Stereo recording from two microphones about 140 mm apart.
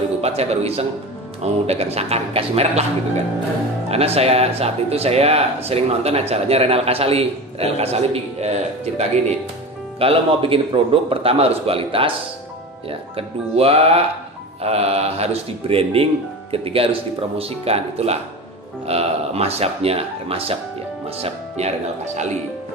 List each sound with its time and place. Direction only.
0.2 s speech: 50° right (ahead or behind)
3.8 s a man's voice: 45° right (ahead or behind)